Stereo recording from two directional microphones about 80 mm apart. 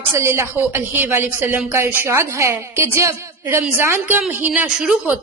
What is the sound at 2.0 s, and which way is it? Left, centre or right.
A woman's voice, right.